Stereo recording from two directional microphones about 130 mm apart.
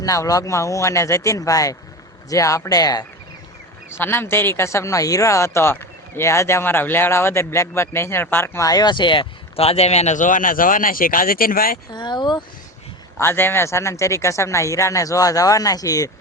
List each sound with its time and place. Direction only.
0.0 s speech: 25° left (ahead or behind)
3.9 s speech: 15° left (ahead or behind); by 11.8 s 90° left
11.9 s speech: 35° left (ahead or behind)
13.1 s speech: 20° left (ahead or behind)